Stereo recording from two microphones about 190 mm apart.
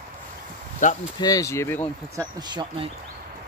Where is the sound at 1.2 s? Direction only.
15° left (ahead or behind).